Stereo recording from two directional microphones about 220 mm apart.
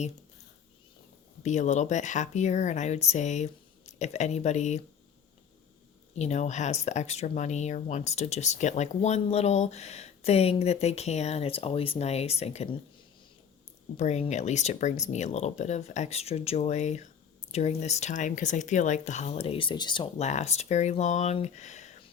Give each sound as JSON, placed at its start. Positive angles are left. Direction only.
{"t": 1.4, "sound": "speech", "side_deg": 30}
{"t": 6.1, "sound": "speech", "side_deg": 30}
{"t": 13.9, "sound": "speech", "side_deg": 30}